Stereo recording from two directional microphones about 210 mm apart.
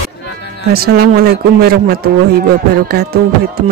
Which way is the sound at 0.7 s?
45° right (ahead or behind).